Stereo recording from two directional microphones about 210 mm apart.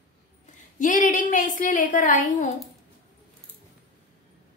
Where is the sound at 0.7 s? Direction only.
40° left (ahead or behind).